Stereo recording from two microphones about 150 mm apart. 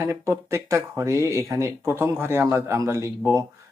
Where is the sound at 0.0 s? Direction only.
20° right (ahead or behind).